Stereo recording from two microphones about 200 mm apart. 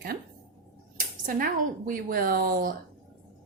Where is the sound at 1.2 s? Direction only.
45° right (ahead or behind).